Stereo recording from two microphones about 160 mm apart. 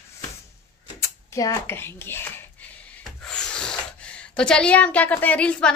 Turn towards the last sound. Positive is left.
turn(degrees=5)  # may be behind; listen again after turning